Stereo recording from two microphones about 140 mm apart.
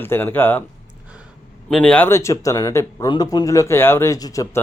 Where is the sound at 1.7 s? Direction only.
5° left (ahead or behind).